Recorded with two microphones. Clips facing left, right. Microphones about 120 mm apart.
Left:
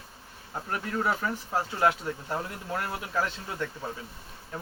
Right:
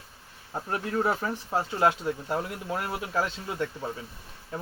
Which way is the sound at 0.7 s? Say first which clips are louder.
Right 2 dB; 30° right (ahead or behind).